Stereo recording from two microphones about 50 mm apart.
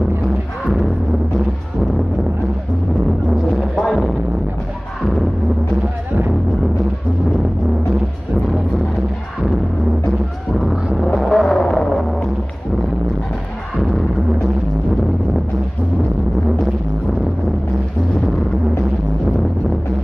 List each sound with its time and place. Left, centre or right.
3.7 s a sound: centre
11.1 s music: centre
11.6 s music: centre